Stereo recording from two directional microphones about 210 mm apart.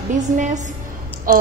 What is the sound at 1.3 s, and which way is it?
Speech, 40° right (ahead or behind).